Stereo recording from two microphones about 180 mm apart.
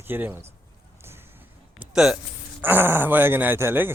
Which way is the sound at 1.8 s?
Centre (ahead or behind).